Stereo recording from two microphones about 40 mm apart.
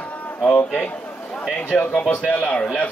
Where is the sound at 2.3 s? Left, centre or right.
Left.